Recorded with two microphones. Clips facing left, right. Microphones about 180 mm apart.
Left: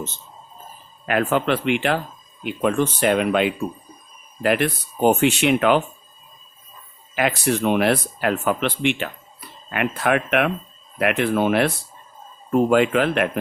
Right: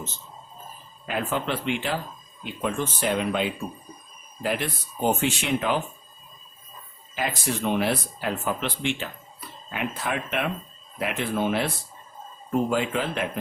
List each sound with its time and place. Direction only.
1.0 s speech: 70° left (ahead or behind)
7.2 s speech: 70° left (ahead or behind)